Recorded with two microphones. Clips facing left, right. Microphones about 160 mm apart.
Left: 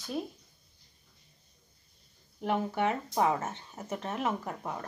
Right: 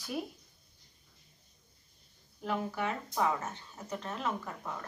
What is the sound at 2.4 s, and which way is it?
Speech, 25° left (ahead or behind).